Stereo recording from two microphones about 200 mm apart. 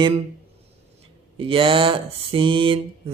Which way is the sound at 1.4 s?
25° right (ahead or behind).